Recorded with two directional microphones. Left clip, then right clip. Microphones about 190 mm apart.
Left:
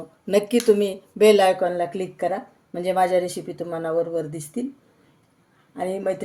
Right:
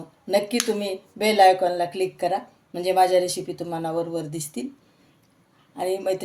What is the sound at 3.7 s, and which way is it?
Speech, 40° left (ahead or behind).